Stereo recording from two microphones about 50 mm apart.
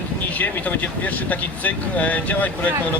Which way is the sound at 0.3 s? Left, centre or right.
Left.